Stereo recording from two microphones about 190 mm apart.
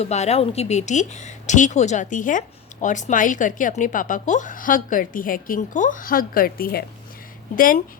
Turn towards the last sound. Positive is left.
turn(degrees=45)  # may be behind; listen again after turning